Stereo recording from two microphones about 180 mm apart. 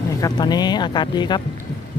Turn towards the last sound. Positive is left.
turn(degrees=25)  # may be behind; listen again after turning